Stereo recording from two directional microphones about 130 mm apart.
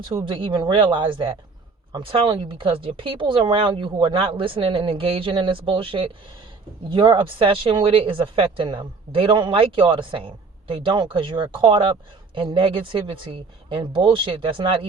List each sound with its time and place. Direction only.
0.3 s speech: 40° right (ahead or behind)